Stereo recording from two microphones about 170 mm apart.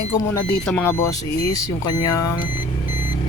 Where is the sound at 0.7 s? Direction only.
10° left (ahead or behind).